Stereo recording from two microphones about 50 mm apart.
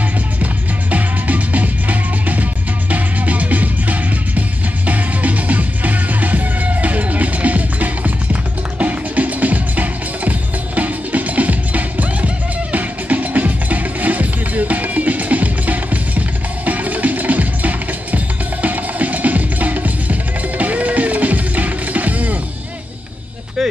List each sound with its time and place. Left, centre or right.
0.4 s music: right